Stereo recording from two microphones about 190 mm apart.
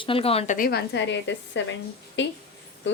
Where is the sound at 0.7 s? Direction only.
60° left (ahead or behind).